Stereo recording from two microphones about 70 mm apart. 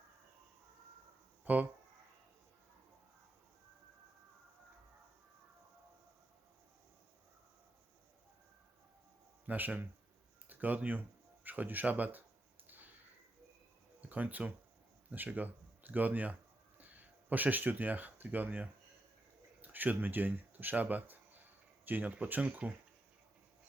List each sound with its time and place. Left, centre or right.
1.5 s speech: right
9.5 s speech: right
12.6 s a sound: right
14.0 s speech: right